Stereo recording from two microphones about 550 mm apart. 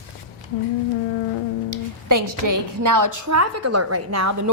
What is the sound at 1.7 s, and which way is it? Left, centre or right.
A woman's voice, right.